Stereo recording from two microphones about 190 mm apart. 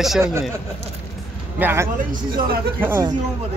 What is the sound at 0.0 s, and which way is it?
Speech, centre (ahead or behind).